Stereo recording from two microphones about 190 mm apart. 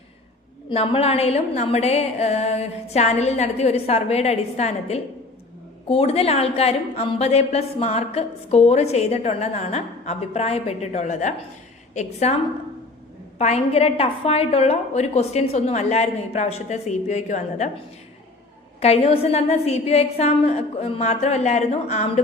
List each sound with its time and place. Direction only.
0.7 s a woman's voice: 30° left (ahead or behind)
13.4 s a woman's voice: 35° left (ahead or behind)